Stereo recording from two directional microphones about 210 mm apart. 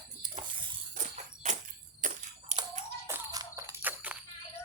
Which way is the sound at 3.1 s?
15° right (ahead or behind).